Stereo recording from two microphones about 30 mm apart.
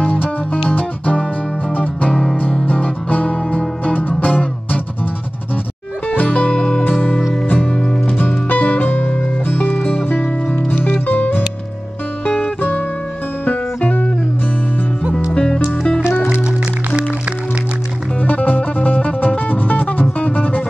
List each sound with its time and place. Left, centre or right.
0.1 s music: left
6.0 s music: left
6.5 s music: left
6.8 s music: left
8.5 s music: left
8.8 s music: left
10.0 s music: left
13.5 s music: left
15.3 s music: left
18.2 s music: left